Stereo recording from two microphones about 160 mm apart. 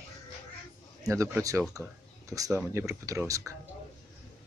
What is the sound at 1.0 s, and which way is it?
Speech, 20° right (ahead or behind).